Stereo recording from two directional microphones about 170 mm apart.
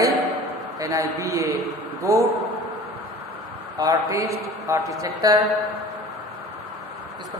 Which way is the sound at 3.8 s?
20° right (ahead or behind).